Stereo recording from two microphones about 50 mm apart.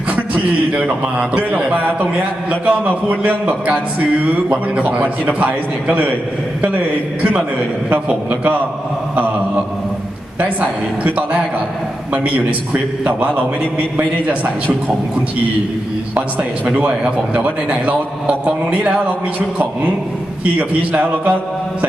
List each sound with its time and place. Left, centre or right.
0.2 s a sound: right
2.5 s a man's voice: right
13.1 s a man's voice: right
17.3 s a man's voice: right
20.4 s a man's voice: right